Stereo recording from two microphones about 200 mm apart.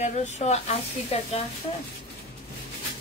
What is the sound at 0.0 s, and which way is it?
Speech, 35° left (ahead or behind).